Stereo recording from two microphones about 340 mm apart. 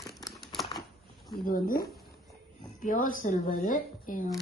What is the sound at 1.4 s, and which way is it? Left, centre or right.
Speech, left.